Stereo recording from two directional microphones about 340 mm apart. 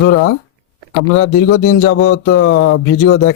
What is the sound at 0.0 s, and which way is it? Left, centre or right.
Speech, left.